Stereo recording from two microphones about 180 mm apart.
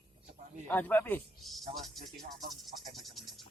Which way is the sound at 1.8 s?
Centre (ahead or behind).